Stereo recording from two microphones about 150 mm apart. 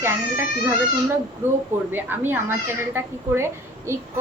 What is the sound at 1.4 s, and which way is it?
Speech, 15° right (ahead or behind).